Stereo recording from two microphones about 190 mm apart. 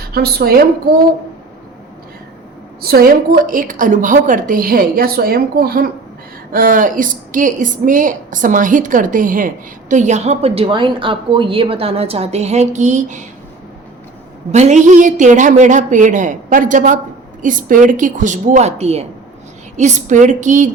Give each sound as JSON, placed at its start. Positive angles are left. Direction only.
{"t": 0.1, "sound": "a woman's voice", "side_deg": -55}
{"t": 2.8, "sound": "a woman's voice", "side_deg": -50}
{"t": 14.5, "sound": "a woman's voice", "side_deg": -40}